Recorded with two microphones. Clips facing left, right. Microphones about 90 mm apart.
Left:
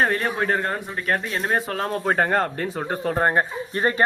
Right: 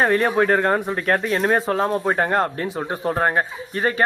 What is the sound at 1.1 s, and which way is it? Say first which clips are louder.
Speech: right 4 dB; 25° right (ahead or behind).